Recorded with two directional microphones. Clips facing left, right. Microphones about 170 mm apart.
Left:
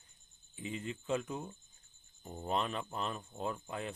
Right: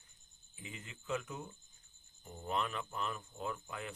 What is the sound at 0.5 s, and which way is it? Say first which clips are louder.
Speech: left 10 dB; 30° left (ahead or behind).